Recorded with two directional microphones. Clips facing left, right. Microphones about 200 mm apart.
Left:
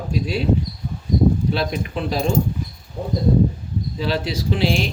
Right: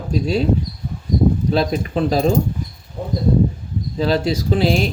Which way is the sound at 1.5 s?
40° right (ahead or behind).